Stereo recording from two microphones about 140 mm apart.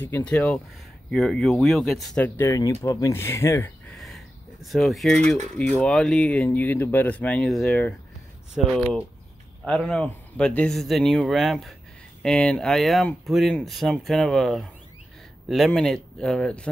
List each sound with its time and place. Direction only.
0.0 s speech: 10° left (ahead or behind)
2.2 s speech: 15° left (ahead or behind)
4.0 s a sound: centre (ahead or behind)
5.8 s speech: 5° left (ahead or behind)